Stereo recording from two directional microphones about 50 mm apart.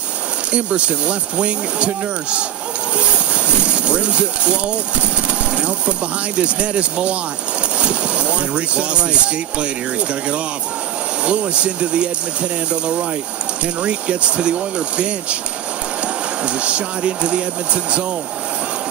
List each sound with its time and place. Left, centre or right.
0.5 s speech: right
3.6 s speech: right
16.4 s speech: right